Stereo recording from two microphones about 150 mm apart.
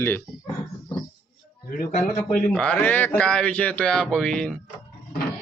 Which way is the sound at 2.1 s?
5° left (ahead or behind).